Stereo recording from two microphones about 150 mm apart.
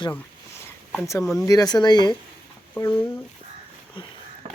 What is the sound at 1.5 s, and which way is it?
Speech, 25° left (ahead or behind).